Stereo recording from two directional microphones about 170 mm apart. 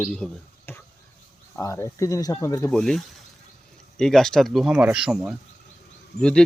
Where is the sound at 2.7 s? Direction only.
5° left (ahead or behind).